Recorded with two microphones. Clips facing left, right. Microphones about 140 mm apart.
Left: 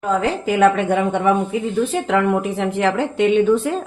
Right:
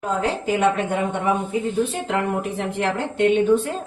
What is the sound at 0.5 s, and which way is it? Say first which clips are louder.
Speech: left 6 dB; 90° left.